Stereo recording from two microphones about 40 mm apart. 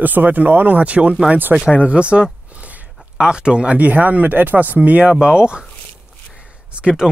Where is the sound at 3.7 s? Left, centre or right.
Right.